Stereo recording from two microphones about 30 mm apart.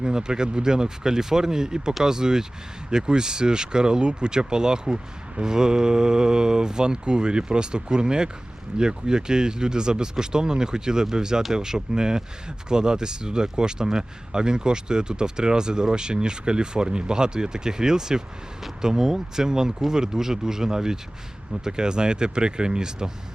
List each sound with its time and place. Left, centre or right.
0.0 s speech: right